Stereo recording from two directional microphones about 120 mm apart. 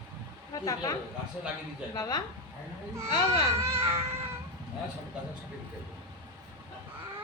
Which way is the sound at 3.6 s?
20° right (ahead or behind).